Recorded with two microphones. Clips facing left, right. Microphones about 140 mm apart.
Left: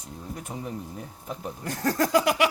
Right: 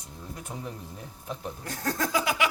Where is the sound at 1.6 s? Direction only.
70° left (ahead or behind).